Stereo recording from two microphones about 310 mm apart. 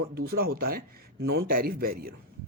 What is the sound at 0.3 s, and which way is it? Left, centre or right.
A man's voice, right.